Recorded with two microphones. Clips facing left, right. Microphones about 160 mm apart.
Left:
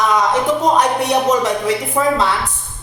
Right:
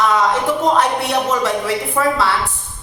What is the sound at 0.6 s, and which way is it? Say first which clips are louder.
A woman's voice: left 1 dB; 15° left (ahead or behind).